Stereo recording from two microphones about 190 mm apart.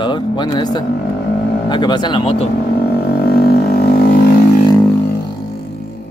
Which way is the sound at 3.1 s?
50° left (ahead or behind).